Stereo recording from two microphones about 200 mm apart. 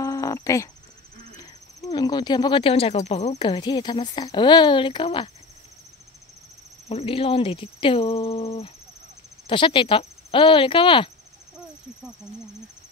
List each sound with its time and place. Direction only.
0.0 s a sound: 15° left (ahead or behind)
1.9 s speech: 20° left (ahead or behind)
6.9 s speech: 30° left (ahead or behind)